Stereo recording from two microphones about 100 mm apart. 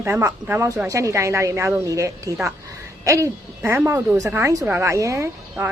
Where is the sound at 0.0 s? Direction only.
25° right (ahead or behind).